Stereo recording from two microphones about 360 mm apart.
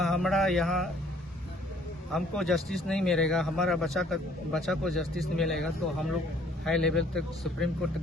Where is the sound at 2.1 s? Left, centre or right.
Centre.